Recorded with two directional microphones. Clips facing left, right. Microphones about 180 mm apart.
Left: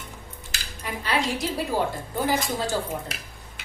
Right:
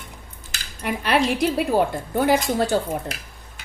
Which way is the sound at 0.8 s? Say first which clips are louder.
Right 6 dB; 65° right (ahead or behind).